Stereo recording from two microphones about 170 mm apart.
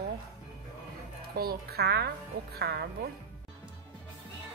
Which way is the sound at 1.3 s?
65° right (ahead or behind).